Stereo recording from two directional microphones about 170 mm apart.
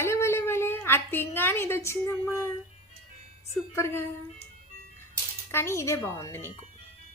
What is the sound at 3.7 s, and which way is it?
Speech, 15° left (ahead or behind).